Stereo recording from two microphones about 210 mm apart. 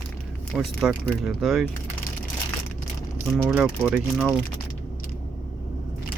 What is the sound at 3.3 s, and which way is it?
Speech, 5° right (ahead or behind).